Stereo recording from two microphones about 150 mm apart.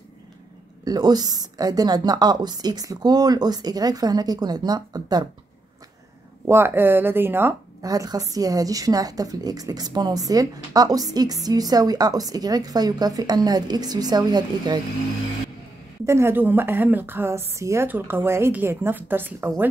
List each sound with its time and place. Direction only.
0.8 s a woman's voice: 25° right (ahead or behind)
6.4 s a woman's voice: 15° right (ahead or behind)
16.1 s a woman's voice: 15° right (ahead or behind)